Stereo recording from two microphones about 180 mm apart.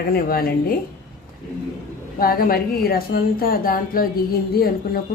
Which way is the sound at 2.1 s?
55° left (ahead or behind).